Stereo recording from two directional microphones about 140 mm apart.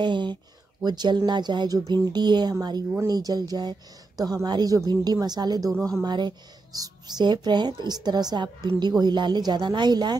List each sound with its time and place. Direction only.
0.0 s a woman's voice: 35° right (ahead or behind)
5.7 s speech: 5° left (ahead or behind)
6.0 s speech: 30° right (ahead or behind)